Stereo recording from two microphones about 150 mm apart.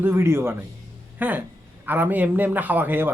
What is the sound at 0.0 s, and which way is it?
A man's voice, 15° right (ahead or behind).